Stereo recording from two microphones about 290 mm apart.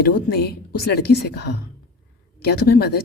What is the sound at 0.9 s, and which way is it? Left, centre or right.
Speech, left.